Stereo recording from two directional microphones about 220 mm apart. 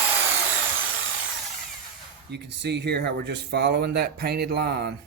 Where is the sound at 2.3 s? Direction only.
50° right (ahead or behind).